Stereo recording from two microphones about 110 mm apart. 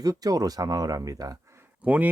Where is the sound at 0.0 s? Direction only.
35° right (ahead or behind).